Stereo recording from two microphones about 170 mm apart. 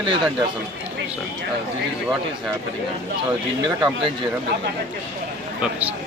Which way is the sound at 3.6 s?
25° right (ahead or behind).